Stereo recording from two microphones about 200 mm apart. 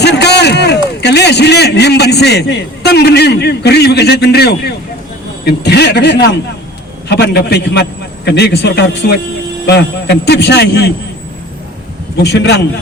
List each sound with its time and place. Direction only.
0.0 s a sound: 55° left (ahead or behind)
5.5 s a man's voice: 55° left (ahead or behind)
12.2 s a man's voice: 55° left (ahead or behind)